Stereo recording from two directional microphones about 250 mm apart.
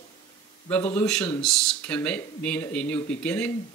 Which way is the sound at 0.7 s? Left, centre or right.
Centre.